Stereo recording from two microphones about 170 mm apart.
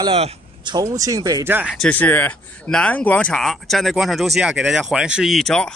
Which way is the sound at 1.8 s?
10° left (ahead or behind).